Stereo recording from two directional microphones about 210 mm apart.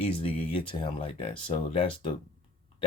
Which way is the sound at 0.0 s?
25° left (ahead or behind).